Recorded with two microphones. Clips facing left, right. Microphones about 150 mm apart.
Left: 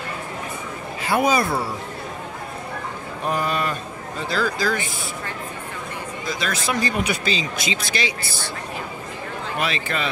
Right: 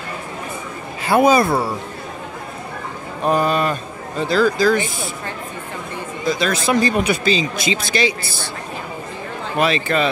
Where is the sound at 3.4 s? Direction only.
25° right (ahead or behind).